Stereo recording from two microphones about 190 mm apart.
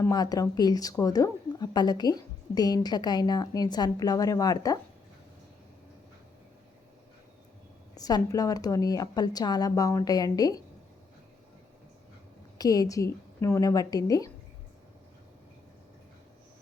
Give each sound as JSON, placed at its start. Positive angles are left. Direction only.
{"t": 0.0, "sound": "a woman's voice", "side_deg": 20}
{"t": 7.9, "sound": "a woman's voice", "side_deg": 20}
{"t": 12.5, "sound": "a woman's voice", "side_deg": 20}